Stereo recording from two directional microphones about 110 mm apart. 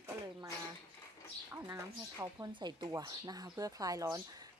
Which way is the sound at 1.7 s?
35° right (ahead or behind).